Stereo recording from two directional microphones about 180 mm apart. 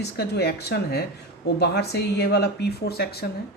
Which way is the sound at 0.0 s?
65° left (ahead or behind).